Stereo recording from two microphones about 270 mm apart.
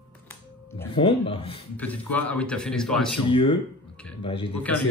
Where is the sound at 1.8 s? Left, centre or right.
Centre.